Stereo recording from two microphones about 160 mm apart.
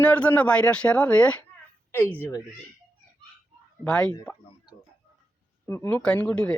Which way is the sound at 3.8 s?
5° left (ahead or behind).